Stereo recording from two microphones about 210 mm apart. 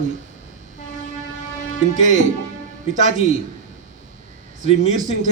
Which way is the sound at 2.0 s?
35° right (ahead or behind).